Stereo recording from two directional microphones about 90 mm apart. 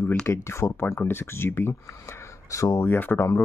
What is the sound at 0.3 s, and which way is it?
Speech, 30° left (ahead or behind).